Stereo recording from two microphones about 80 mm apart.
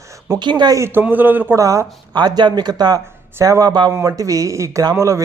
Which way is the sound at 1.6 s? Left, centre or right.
Right.